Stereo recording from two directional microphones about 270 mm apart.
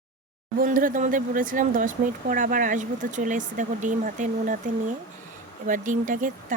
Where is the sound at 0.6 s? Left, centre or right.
Right.